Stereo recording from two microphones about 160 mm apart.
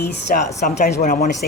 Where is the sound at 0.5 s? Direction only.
50° left (ahead or behind).